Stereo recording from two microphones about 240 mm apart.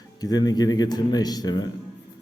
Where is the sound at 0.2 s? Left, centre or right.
Centre.